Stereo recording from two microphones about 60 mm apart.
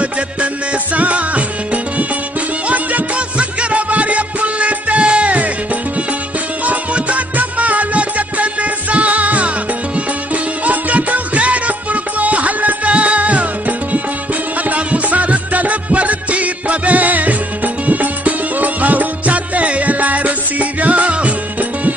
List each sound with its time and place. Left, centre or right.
0.9 s music: right
6.6 s music: right